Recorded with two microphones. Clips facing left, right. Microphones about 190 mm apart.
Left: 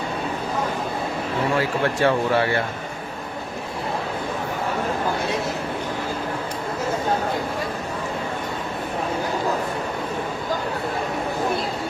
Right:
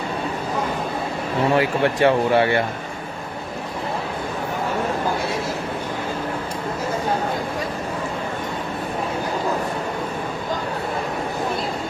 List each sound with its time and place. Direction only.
1.5 s speech: 20° right (ahead or behind)